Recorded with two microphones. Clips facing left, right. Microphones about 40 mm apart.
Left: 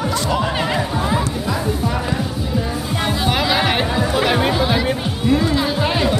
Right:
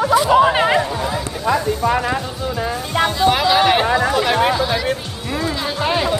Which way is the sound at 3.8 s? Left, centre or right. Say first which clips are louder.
Right 3 dB; centre.